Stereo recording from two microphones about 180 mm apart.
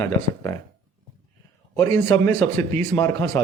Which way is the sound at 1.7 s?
10° left (ahead or behind).